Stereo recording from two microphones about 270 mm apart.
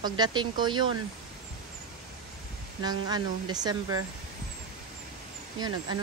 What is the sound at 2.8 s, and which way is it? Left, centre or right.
A woman's voice, centre.